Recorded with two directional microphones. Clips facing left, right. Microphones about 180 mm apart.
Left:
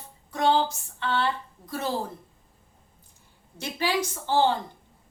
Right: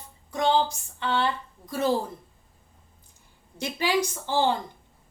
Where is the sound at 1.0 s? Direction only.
15° right (ahead or behind).